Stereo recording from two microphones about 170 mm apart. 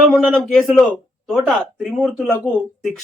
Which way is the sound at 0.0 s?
Centre (ahead or behind).